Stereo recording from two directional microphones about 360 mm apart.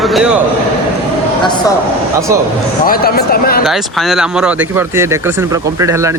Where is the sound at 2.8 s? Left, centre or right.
Left.